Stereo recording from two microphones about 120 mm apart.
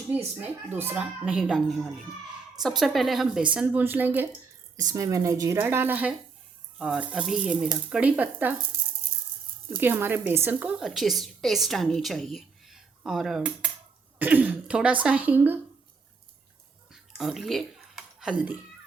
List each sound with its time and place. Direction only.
0.7 s speech: 15° right (ahead or behind)
1.4 s a woman's voice: centre (ahead or behind)
4.8 s a woman's voice: 30° right (ahead or behind); by 8.5 s 15° right (ahead or behind)
9.6 s a woman's voice: 20° right (ahead or behind); by 13.4 s centre (ahead or behind)
14.2 s speech: 15° right (ahead or behind)
16.9 s a sound: centre (ahead or behind)